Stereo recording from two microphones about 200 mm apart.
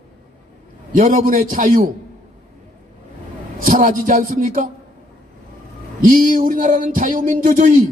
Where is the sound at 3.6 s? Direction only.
40° right (ahead or behind).